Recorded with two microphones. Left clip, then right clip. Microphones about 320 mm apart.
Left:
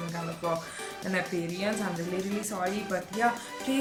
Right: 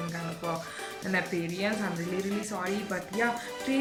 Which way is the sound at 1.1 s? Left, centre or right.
Centre.